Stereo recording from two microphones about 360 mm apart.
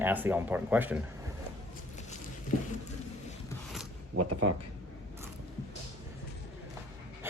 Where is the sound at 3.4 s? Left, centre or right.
Centre.